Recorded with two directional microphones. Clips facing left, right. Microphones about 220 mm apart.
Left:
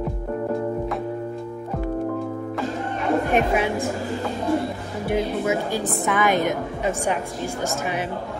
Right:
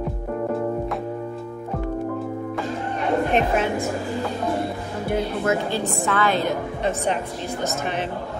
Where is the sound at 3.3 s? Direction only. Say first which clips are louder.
Left 1 dB; 10° left (ahead or behind).